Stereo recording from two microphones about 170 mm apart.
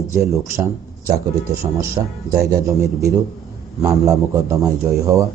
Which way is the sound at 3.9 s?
20° right (ahead or behind).